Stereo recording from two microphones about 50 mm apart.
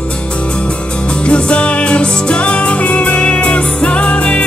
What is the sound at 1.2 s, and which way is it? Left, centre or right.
Music, left.